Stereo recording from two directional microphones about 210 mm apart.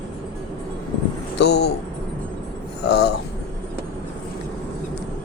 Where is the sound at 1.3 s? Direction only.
50° left (ahead or behind).